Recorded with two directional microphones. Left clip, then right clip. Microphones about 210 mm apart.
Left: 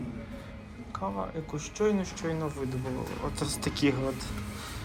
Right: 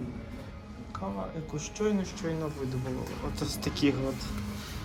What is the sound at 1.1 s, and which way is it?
Speech, 5° right (ahead or behind).